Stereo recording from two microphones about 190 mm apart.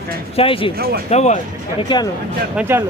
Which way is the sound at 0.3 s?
30° left (ahead or behind).